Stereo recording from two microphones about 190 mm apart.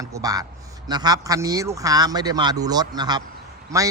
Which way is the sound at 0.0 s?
20° right (ahead or behind).